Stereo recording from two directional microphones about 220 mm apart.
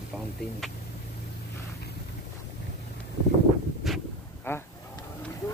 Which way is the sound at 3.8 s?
5° left (ahead or behind).